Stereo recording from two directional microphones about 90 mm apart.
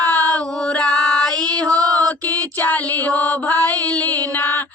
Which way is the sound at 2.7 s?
15° left (ahead or behind).